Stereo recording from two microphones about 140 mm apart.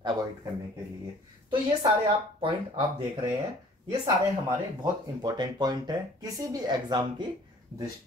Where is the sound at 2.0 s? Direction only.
35° right (ahead or behind).